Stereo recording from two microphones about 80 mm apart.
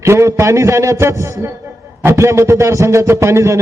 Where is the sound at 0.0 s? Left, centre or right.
Right.